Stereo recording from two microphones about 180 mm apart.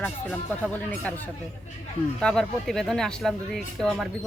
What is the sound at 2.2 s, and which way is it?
Speech, 5° left (ahead or behind).